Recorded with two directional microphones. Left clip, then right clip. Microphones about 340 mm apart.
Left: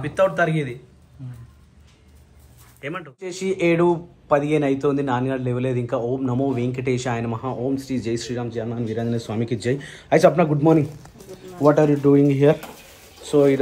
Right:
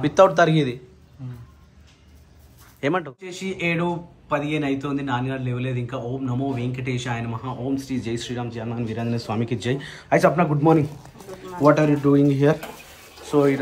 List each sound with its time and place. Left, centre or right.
0.0 s speech: centre
2.8 s speech: centre
7.7 s speech: left
8.0 s speech: centre
9.5 s speech: left
10.0 s speech: centre